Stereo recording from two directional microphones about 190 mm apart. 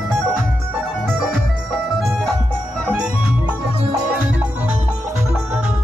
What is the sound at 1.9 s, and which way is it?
Music, centre (ahead or behind).